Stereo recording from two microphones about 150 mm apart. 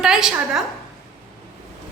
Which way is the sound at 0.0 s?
5° right (ahead or behind).